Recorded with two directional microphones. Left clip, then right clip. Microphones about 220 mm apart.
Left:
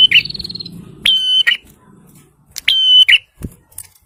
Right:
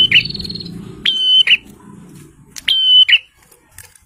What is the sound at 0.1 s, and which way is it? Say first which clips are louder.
Smoke detector: even; 35° left (ahead or behind).